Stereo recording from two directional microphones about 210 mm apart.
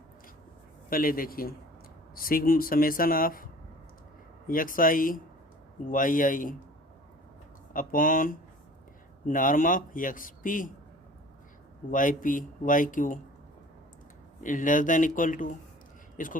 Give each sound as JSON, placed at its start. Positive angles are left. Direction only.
{"t": 0.9, "sound": "speech", "side_deg": 40}
{"t": 4.4, "sound": "a man's voice", "side_deg": 40}
{"t": 7.7, "sound": "a man's voice", "side_deg": 40}
{"t": 11.9, "sound": "a man's voice", "side_deg": 40}
{"t": 14.4, "sound": "a man's voice", "side_deg": 40}